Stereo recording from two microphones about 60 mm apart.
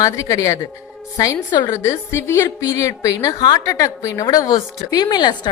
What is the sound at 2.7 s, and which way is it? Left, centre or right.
A woman's voice, left.